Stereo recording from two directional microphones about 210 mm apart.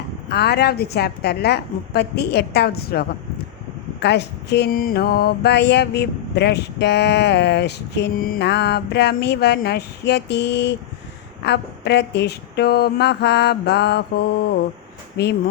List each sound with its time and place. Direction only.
0.3 s mantra: 50° left (ahead or behind)